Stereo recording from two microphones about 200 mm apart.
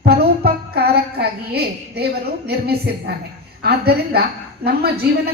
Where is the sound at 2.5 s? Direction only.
50° right (ahead or behind).